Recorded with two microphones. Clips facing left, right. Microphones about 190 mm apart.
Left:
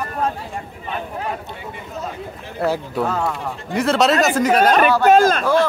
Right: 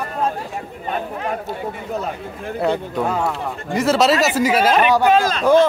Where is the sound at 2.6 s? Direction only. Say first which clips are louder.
Even; 5° left (ahead or behind).